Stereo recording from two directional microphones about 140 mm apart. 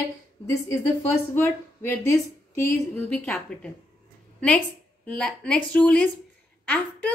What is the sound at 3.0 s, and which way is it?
A woman's voice, 10° left (ahead or behind).